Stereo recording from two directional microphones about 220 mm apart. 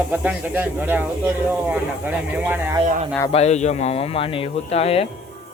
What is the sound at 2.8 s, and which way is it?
Speech, 35° right (ahead or behind).